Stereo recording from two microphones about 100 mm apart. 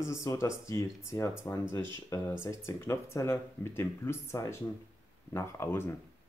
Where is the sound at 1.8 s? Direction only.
50° right (ahead or behind).